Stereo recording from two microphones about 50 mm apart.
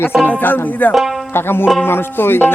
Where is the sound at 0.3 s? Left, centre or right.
Left.